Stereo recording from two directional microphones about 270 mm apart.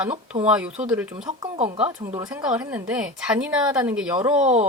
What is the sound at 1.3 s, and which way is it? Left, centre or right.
Speech, right.